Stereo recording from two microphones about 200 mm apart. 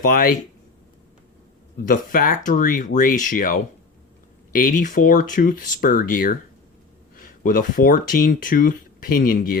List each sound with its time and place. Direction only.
0.0 s speech: 45° left (ahead or behind)
1.8 s speech: 45° left (ahead or behind)